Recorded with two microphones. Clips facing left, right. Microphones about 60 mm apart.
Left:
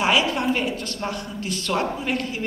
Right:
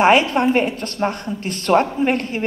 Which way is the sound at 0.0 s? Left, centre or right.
Right.